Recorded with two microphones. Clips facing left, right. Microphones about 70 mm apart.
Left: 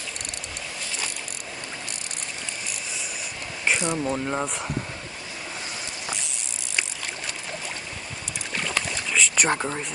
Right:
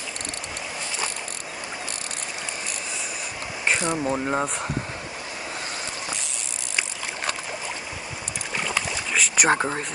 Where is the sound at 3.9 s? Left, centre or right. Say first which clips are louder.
Right 2 dB; centre.